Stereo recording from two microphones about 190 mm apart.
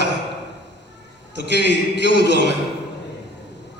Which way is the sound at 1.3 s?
65° left (ahead or behind).